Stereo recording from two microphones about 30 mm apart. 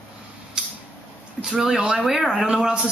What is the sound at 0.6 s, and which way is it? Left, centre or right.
Creak, right.